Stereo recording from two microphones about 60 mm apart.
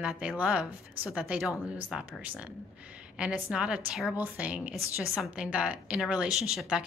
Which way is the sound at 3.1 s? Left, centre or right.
Centre.